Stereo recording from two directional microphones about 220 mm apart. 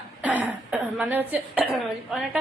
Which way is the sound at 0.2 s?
5° right (ahead or behind).